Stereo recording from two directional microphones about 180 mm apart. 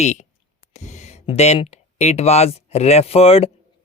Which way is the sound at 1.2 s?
35° left (ahead or behind).